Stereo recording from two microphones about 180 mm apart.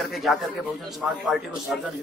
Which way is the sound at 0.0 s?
Centre (ahead or behind).